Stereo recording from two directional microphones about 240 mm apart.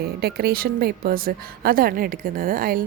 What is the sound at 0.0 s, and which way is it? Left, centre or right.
A woman's voice, right.